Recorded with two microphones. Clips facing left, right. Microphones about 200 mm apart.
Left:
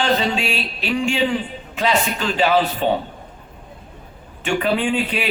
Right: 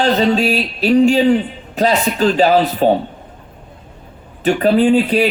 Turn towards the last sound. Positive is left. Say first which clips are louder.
# right 9 dB
turn(degrees=-40)  # may be behind; listen again after turning